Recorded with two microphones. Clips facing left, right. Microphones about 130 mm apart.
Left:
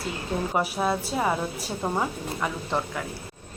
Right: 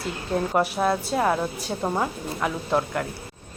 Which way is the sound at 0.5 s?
Centre (ahead or behind).